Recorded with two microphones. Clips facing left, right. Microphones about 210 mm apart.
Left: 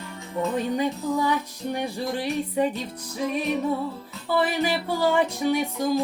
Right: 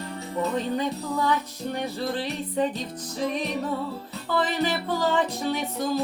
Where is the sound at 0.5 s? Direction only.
10° left (ahead or behind).